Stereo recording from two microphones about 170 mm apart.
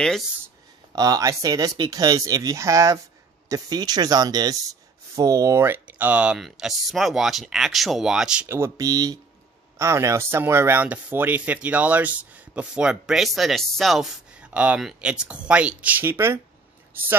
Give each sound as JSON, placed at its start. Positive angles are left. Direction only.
{"t": 0.9, "sound": "speech", "side_deg": -20}